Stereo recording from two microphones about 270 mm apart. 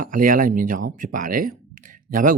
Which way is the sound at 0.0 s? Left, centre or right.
Right.